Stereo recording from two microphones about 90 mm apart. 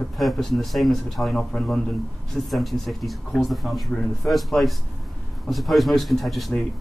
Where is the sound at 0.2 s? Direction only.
Centre (ahead or behind).